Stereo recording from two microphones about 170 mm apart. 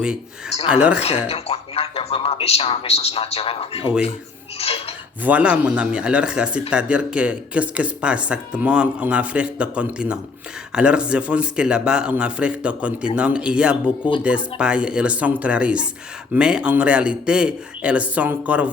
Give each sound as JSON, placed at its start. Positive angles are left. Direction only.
{"t": 0.7, "sound": "speech", "side_deg": -5}
{"t": 1.3, "sound": "speech", "side_deg": 35}
{"t": 5.2, "sound": "speech", "side_deg": -5}